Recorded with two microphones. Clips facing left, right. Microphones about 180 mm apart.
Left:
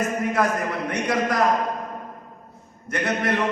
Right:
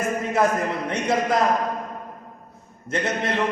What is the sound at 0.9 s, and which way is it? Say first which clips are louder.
Speech: right 1 dB; 25° right (ahead or behind).